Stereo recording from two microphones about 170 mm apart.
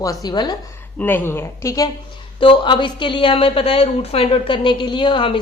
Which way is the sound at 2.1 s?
30° left (ahead or behind).